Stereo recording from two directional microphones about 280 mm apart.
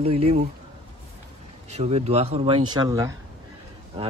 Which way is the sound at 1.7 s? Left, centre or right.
Right.